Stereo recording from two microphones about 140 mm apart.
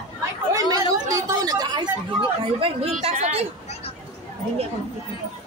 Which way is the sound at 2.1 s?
45° right (ahead or behind).